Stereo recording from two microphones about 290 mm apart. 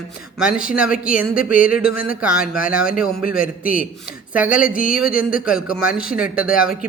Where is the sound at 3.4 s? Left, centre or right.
Left.